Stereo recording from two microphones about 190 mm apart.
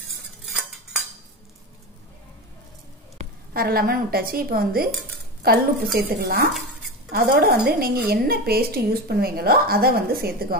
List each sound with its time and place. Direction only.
0.5 s cutlery: 5° right (ahead or behind)
3.5 s a woman's voice: 50° right (ahead or behind)